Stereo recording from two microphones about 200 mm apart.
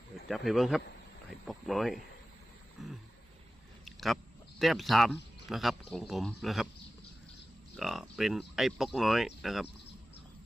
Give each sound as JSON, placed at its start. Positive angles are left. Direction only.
{"t": 0.3, "sound": "speech", "side_deg": 0}
{"t": 3.8, "sound": "a sound", "side_deg": 0}
{"t": 4.6, "sound": "speech", "side_deg": 0}
{"t": 7.8, "sound": "speech", "side_deg": 0}